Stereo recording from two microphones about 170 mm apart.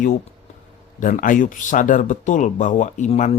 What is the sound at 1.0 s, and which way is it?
Speech, 50° left (ahead or behind).